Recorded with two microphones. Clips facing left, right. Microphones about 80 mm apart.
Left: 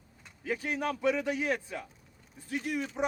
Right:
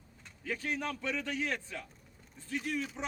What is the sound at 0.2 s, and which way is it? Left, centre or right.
A man's voice, centre.